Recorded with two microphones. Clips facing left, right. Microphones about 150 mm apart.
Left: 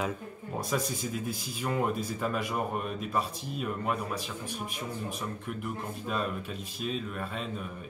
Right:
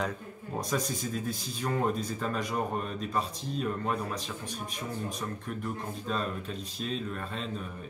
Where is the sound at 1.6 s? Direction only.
10° left (ahead or behind).